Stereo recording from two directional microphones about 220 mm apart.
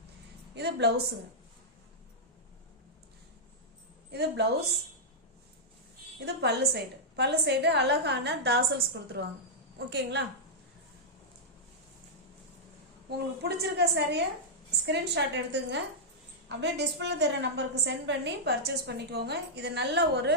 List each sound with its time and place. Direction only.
0.5 s speech: 50° right (ahead or behind)
4.1 s speech: 50° right (ahead or behind)
6.1 s a woman's voice: 50° right (ahead or behind)
13.1 s a woman's voice: 45° right (ahead or behind)